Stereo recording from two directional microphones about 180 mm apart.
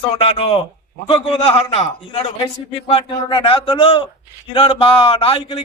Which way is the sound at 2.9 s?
30° left (ahead or behind).